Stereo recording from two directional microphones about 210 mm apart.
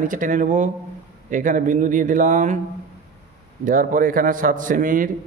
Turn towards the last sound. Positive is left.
turn(degrees=-40)  # may be behind; listen again after turning